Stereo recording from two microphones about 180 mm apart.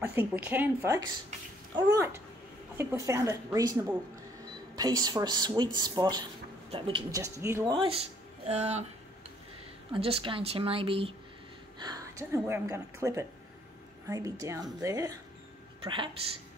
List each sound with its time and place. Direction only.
0.0 s speech: 10° right (ahead or behind); by 7.2 s 30° right (ahead or behind)
7.2 s speech: 15° right (ahead or behind)
8.5 s speech: 40° right (ahead or behind)
9.9 s speech: 30° right (ahead or behind)
11.8 s speech: 20° right (ahead or behind)